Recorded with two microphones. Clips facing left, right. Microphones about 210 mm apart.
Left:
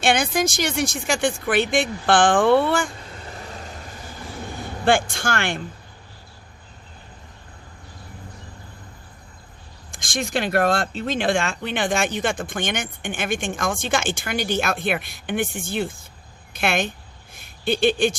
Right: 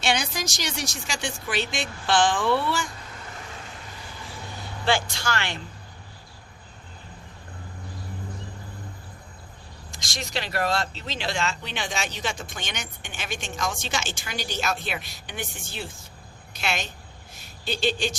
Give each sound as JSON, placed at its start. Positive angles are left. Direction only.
{"t": 0.0, "sound": "speech", "side_deg": 55}
{"t": 4.9, "sound": "speech", "side_deg": 50}
{"t": 9.9, "sound": "speech", "side_deg": 50}